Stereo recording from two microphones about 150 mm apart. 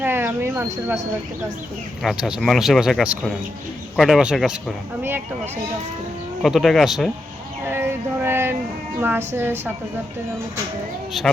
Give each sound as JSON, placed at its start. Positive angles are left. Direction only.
{"t": 0.0, "sound": "speech", "side_deg": -15}
{"t": 2.0, "sound": "speech", "side_deg": 0}
{"t": 6.4, "sound": "speech", "side_deg": 0}
{"t": 7.7, "sound": "a sound", "side_deg": -15}
{"t": 9.0, "sound": "speech", "side_deg": -15}